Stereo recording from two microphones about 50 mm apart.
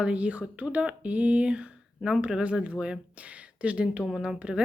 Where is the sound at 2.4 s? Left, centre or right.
Right.